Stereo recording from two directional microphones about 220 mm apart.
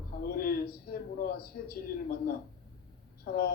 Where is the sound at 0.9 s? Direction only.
45° left (ahead or behind).